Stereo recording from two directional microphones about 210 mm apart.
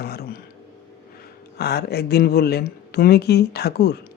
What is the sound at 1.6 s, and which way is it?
Speech, 50° left (ahead or behind).